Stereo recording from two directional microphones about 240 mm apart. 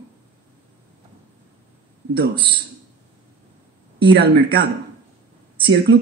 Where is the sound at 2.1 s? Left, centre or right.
Right.